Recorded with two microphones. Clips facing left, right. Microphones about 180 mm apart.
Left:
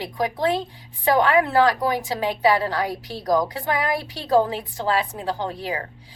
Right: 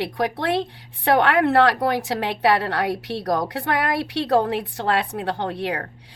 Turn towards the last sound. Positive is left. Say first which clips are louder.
# right 2 dB
turn(degrees=-65)  # may be behind; listen again after turning